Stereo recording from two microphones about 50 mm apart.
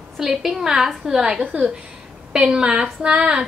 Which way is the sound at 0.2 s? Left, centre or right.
Centre.